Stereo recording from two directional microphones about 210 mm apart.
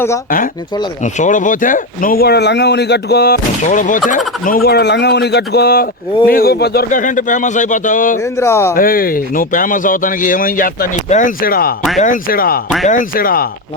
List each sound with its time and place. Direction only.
1.0 s speech: 35° left (ahead or behind)
8.2 s speech: 10° left (ahead or behind)
8.7 s speech: 45° left (ahead or behind)